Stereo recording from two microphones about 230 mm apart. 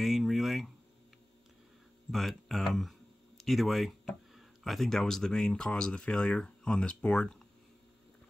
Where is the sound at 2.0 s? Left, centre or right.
Centre.